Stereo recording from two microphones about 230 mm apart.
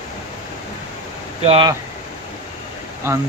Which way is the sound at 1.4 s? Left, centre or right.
Right.